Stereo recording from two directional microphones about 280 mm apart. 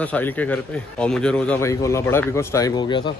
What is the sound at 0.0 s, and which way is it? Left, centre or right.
A man's voice, centre.